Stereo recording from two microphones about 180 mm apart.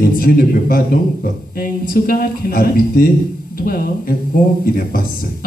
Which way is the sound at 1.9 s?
55° left (ahead or behind).